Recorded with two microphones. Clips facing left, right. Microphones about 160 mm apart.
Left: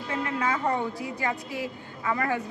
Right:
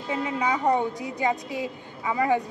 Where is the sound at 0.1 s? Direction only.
15° right (ahead or behind).